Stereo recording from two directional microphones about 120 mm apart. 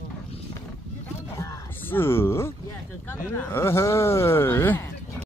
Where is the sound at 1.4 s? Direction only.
20° left (ahead or behind).